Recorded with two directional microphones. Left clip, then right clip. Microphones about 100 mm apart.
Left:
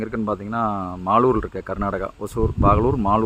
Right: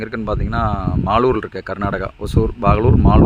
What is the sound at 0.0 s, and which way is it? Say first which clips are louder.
Speech: right 2 dB; 25° right (ahead or behind).